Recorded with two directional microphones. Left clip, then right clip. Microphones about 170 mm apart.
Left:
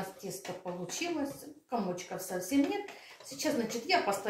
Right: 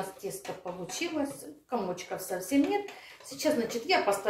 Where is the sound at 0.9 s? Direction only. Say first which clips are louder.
Right 3 dB; 20° right (ahead or behind).